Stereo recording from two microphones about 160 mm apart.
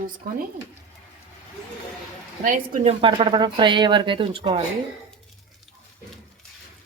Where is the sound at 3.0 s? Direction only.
30° right (ahead or behind).